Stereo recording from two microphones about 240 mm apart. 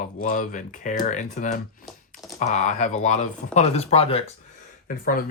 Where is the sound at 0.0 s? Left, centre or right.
Left.